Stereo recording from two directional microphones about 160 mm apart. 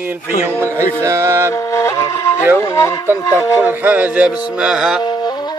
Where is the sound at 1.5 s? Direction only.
20° left (ahead or behind).